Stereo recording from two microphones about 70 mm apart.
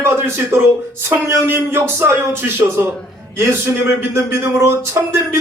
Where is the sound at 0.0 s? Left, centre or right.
Right.